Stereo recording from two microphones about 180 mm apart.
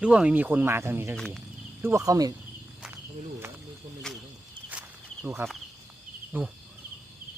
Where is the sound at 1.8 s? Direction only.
15° right (ahead or behind).